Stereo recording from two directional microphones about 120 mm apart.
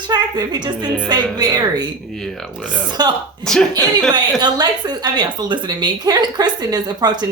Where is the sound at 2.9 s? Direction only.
35° right (ahead or behind).